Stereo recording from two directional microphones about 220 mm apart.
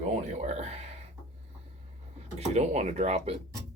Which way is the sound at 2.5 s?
30° right (ahead or behind).